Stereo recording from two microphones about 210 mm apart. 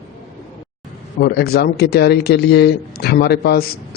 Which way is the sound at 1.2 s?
50° left (ahead or behind).